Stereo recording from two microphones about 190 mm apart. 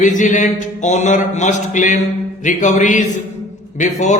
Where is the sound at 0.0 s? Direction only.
40° left (ahead or behind).